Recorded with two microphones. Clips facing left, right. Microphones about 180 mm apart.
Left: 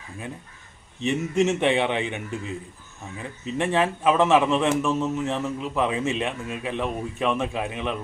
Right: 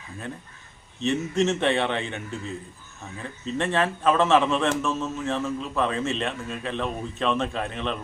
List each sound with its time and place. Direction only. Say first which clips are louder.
0.9 s a man's voice: left 1 dB; 15° left (ahead or behind)